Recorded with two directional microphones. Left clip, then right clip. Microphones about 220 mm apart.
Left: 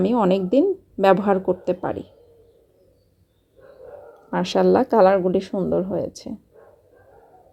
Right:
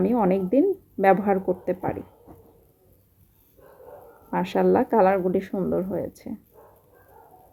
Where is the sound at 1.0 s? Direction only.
15° left (ahead or behind).